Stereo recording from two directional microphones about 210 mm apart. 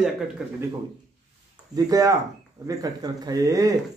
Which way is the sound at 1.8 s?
15° right (ahead or behind).